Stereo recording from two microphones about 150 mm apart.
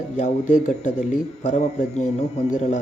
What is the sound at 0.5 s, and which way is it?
Speech, 55° left (ahead or behind).